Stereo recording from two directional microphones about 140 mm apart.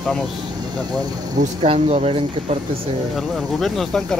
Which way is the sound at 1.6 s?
45° right (ahead or behind).